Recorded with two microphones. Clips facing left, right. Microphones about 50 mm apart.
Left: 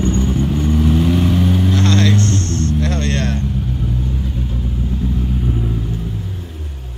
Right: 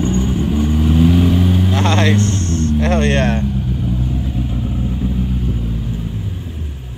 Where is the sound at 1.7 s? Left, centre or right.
Centre.